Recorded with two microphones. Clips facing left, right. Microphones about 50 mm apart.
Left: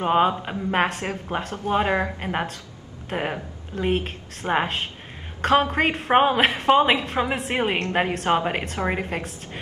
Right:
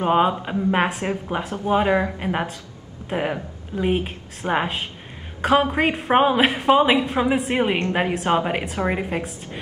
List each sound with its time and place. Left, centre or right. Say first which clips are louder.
0.0 s a woman's voice: right 1 dB; centre